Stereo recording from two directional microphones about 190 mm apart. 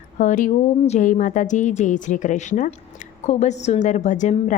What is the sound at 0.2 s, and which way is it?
A woman's voice, 40° left (ahead or behind).